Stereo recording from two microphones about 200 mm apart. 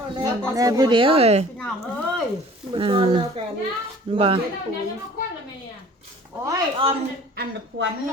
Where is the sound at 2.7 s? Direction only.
25° right (ahead or behind).